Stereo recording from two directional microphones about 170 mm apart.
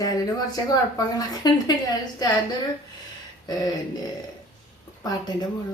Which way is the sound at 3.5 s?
25° left (ahead or behind).